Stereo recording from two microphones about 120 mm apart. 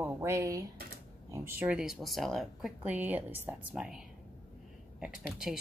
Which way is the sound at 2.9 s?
15° right (ahead or behind).